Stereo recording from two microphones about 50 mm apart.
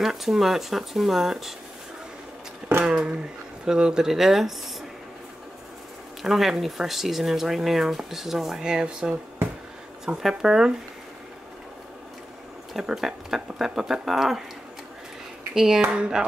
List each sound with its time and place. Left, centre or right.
0.0 s speech: centre
2.8 s speech: right; by 4.6 s centre
6.2 s speech: centre
12.8 s speech: centre
15.5 s speech: centre